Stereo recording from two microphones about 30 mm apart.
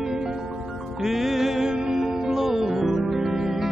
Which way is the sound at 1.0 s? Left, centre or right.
Centre.